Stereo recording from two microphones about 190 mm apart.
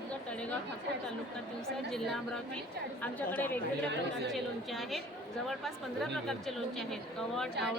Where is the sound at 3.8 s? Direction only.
65° right (ahead or behind).